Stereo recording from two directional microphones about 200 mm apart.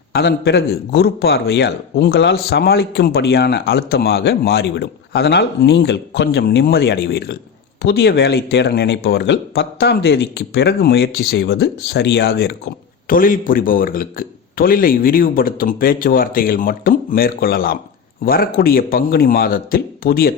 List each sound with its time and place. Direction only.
0.1 s a man's voice: 55° left (ahead or behind)